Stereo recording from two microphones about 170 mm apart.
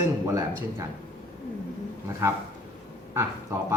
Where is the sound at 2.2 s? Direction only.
15° right (ahead or behind).